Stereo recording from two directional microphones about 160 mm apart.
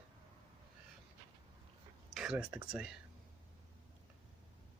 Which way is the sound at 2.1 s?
5° right (ahead or behind).